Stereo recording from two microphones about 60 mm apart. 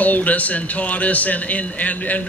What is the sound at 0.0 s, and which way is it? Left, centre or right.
Speech, left.